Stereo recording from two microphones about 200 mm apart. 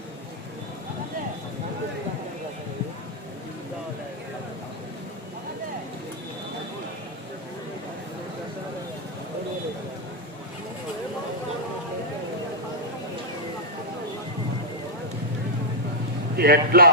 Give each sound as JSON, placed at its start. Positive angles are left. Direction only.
{"t": 16.4, "sound": "a man's voice", "side_deg": -50}